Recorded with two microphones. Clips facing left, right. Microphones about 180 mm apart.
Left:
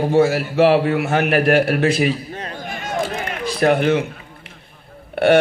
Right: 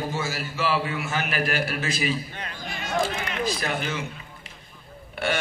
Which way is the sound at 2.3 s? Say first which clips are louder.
Left 8 dB; 40° left (ahead or behind).